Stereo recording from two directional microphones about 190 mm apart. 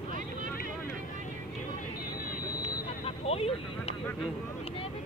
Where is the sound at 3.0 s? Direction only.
30° left (ahead or behind).